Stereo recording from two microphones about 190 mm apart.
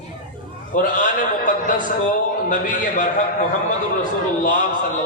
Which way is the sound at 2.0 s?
45° left (ahead or behind).